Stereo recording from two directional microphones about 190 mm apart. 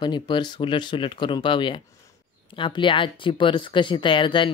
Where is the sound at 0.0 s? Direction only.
25° left (ahead or behind).